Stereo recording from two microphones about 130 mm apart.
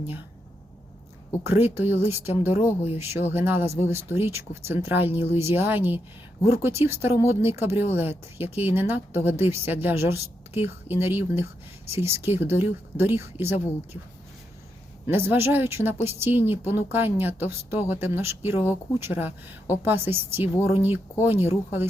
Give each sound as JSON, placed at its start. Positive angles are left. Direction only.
{"t": 1.5, "sound": "speech", "side_deg": -15}
{"t": 15.0, "sound": "speech", "side_deg": -15}